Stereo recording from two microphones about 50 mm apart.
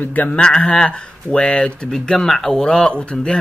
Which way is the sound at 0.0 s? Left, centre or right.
Left.